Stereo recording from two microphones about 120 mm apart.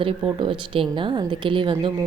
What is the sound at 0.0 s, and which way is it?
A woman's voice, 45° right (ahead or behind).